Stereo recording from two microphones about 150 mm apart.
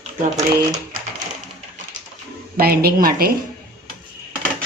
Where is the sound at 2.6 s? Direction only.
90° right.